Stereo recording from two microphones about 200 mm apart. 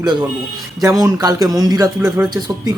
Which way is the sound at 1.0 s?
20° right (ahead or behind).